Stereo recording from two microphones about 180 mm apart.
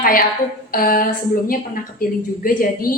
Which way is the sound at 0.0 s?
55° left (ahead or behind).